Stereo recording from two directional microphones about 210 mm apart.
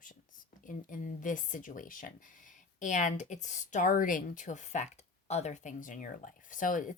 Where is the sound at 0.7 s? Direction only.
40° left (ahead or behind).